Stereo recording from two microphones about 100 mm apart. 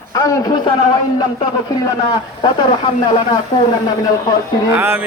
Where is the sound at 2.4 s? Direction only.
50° left (ahead or behind).